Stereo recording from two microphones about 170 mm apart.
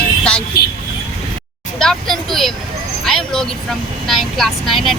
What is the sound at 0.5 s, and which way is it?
Speech, 65° left (ahead or behind).